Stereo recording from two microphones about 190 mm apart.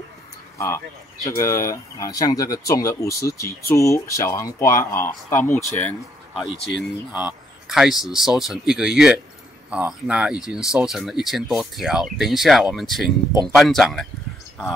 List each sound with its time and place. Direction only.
0.6 s speech: 15° left (ahead or behind)